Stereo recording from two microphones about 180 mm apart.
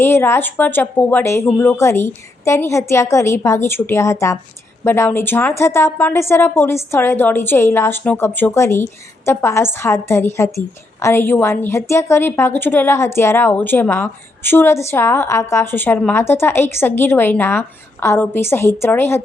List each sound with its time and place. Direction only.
0.0 s a woman's voice: 15° left (ahead or behind)